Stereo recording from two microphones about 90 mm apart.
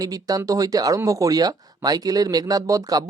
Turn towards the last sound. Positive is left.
turn(degrees=-40)  # may be behind; listen again after turning